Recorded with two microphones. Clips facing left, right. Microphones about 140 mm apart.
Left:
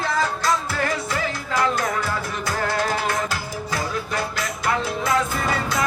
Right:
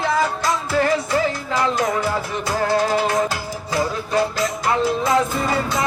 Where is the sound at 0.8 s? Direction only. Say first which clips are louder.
Right 6 dB; 25° right (ahead or behind).